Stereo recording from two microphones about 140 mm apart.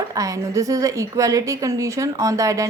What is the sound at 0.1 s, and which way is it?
A woman's voice, 25° right (ahead or behind).